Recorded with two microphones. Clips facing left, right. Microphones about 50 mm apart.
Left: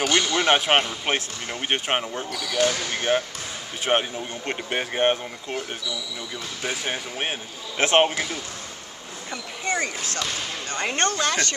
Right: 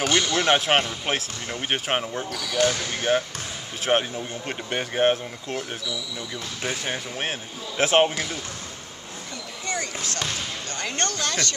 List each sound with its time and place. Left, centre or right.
0.0 s speech: centre
9.3 s a sound: left
10.7 s speech: left